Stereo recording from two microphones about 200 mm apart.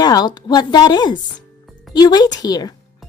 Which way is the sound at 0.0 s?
20° left (ahead or behind).